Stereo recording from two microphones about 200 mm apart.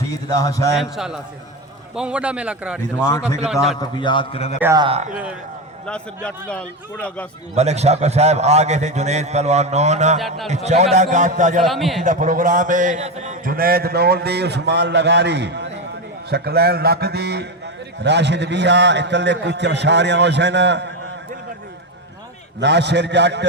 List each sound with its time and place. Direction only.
0.3 s speech: 20° left (ahead or behind)
0.7 s a man's voice: centre (ahead or behind)
3.1 s speech: 15° left (ahead or behind)
3.4 s a man's voice: centre (ahead or behind)
3.8 s a man's voice: 25° left (ahead or behind)
4.6 s a man's voice: 15° right (ahead or behind)
4.9 s a man's voice: 35° right (ahead or behind)
5.8 s a man's voice: 5° left (ahead or behind)
7.5 s a man's voice: 35° right (ahead or behind)
10.2 s a man's voice: centre (ahead or behind)
10.5 s a man's voice: 35° right (ahead or behind)
11.6 s a man's voice: centre (ahead or behind)
12.0 s a man's voice: 40° right (ahead or behind); by 20.9 s 60° right (ahead or behind)
22.6 s a man's voice: 60° right (ahead or behind)